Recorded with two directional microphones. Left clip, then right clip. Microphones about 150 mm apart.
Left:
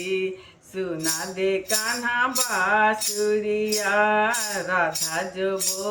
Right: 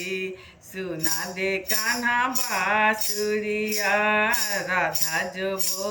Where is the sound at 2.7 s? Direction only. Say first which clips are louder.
Even; 10° left (ahead or behind).